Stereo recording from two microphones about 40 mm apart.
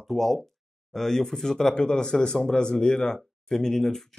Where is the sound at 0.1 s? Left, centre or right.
Centre.